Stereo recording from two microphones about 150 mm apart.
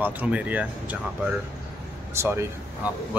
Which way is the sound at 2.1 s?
15° right (ahead or behind).